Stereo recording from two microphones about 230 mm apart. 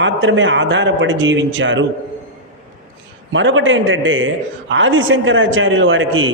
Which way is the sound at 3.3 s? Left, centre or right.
Right.